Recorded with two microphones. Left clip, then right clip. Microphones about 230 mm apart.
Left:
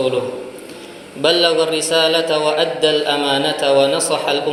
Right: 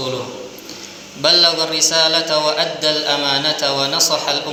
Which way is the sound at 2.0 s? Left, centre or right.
Right.